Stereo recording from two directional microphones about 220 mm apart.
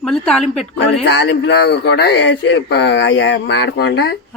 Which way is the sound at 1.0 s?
55° left (ahead or behind).